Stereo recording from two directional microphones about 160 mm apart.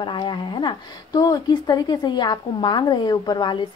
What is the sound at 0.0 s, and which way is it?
Speech, 30° left (ahead or behind).